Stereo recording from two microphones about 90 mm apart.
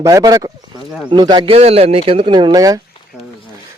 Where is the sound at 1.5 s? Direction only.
90° right; by 2.6 s 55° right (ahead or behind).